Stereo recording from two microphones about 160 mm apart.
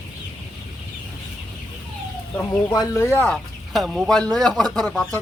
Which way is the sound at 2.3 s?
20° left (ahead or behind).